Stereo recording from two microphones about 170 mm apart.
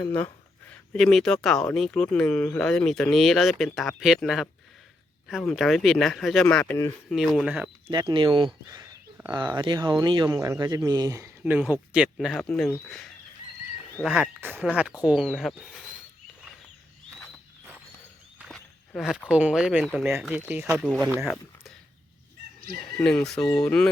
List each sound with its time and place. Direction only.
0.0 s speech: 10° left (ahead or behind)
7.9 s speech: 30° right (ahead or behind); by 12.5 s centre (ahead or behind)
14.0 s speech: centre (ahead or behind)
18.3 s walk: centre (ahead or behind)
19.3 s speech: 5° right (ahead or behind)
23.0 s speech: 10° left (ahead or behind)